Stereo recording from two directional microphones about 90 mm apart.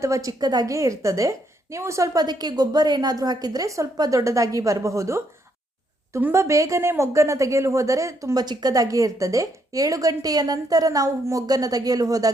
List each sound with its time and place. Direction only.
0.0 s a woman's voice: 40° right (ahead or behind)
2.1 s a woman's voice: 50° right (ahead or behind)